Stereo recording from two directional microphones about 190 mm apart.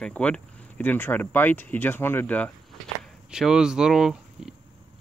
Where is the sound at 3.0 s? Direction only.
5° right (ahead or behind).